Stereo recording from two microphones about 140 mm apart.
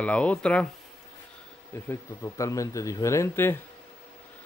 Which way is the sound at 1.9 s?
20° left (ahead or behind).